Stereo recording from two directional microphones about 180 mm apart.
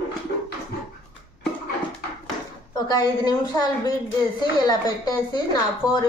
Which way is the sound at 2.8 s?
25° left (ahead or behind).